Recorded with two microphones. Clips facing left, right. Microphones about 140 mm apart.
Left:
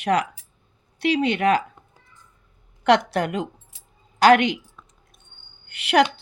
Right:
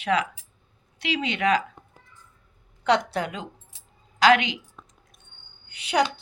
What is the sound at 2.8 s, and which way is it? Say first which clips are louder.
A woman's voice: left 4 dB; 75° left (ahead or behind).